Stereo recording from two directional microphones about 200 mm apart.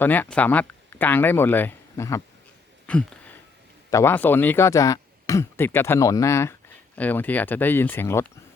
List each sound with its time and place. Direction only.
0.0 s speech: 10° left (ahead or behind)
2.8 s a sound: 5° left (ahead or behind)
3.9 s speech: 10° left (ahead or behind)